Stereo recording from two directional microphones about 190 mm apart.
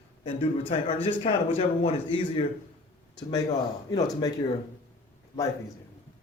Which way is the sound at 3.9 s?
20° left (ahead or behind).